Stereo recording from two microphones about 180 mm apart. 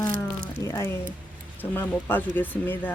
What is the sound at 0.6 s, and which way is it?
Speech, 15° left (ahead or behind).